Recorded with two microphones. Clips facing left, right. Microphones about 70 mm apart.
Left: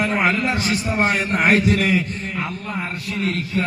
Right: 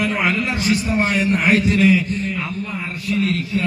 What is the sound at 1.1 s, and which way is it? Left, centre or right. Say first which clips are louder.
Speech: right 1 dB; left.